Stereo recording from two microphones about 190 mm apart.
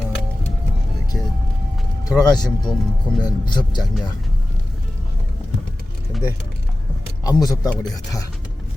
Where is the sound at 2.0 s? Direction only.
20° left (ahead or behind).